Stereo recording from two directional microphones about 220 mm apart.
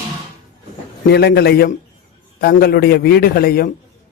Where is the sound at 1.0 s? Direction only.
45° left (ahead or behind).